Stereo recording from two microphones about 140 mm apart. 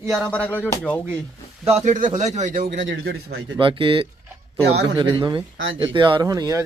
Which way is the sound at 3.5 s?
35° right (ahead or behind).